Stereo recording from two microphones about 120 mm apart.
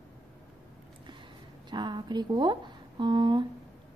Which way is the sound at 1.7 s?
40° right (ahead or behind).